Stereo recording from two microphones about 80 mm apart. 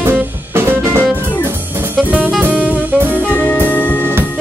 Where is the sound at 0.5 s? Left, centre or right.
Right.